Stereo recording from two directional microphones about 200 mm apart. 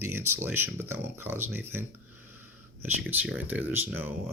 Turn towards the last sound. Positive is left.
turn(degrees=-10)  # may be behind; listen again after turning